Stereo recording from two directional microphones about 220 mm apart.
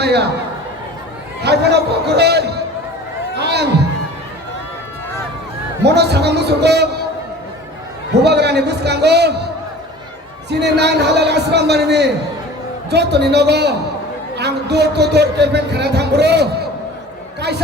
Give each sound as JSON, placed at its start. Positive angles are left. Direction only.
{"t": 0.0, "sound": "a man's voice", "side_deg": -50}
{"t": 1.5, "sound": "a man's voice", "side_deg": -50}
{"t": 5.8, "sound": "a man's voice", "side_deg": -50}
{"t": 8.2, "sound": "a man's voice", "side_deg": -50}
{"t": 10.5, "sound": "a man's voice", "side_deg": -50}